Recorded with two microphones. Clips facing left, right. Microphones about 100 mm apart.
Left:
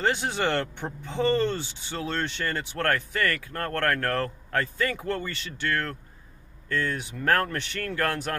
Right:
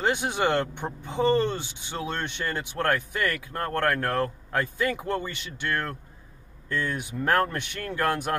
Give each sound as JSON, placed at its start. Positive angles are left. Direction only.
{"t": 0.0, "sound": "speech", "side_deg": -15}